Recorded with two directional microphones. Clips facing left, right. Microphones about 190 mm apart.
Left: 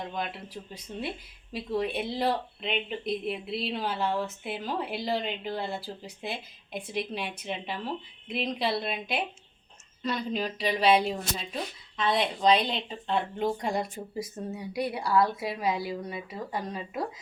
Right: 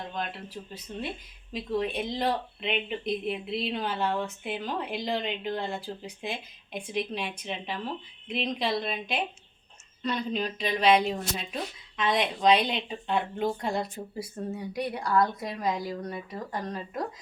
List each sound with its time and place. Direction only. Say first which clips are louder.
0.1 s speech: even; 10° left (ahead or behind)
12.0 s speech: even; 20° right (ahead or behind)
12.4 s speech: right 2 dB; centre (ahead or behind)
14.6 s speech: left 3 dB; 10° left (ahead or behind)